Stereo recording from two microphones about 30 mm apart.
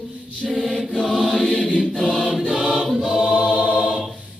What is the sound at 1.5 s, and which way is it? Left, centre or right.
Choir, left.